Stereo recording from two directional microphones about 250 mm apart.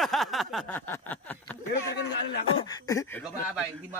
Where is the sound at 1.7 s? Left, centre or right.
Left.